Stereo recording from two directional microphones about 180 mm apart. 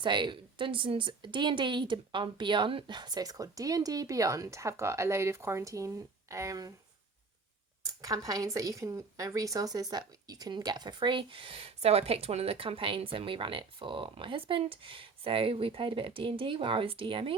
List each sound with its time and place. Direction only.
0.0 s a woman's voice: 25° right (ahead or behind)
8.0 s a woman's voice: 20° right (ahead or behind)